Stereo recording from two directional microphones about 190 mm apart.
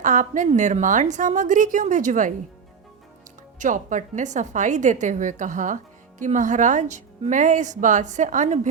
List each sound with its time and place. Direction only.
0.0 s a woman's voice: 40° right (ahead or behind)
3.6 s a woman's voice: 40° right (ahead or behind)